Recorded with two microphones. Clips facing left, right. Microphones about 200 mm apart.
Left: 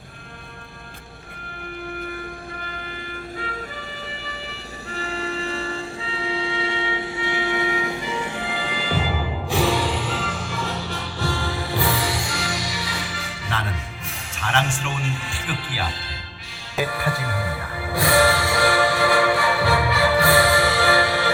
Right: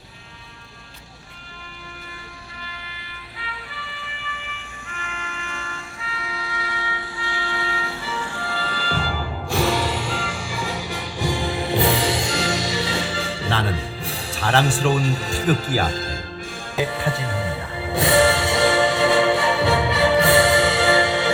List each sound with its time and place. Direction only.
3.4 s music: 45° left (ahead or behind)
4.9 s train: 35° left (ahead or behind); by 9.3 s 10° left (ahead or behind)
9.7 s music: 5° right (ahead or behind)
10.3 s music: 10° right (ahead or behind); by 16.1 s 45° right (ahead or behind)
16.8 s music: 25° right (ahead or behind)